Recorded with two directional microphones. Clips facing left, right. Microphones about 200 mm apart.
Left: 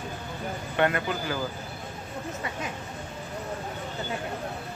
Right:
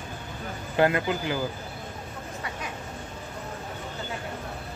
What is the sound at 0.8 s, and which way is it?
Speech, 25° right (ahead or behind).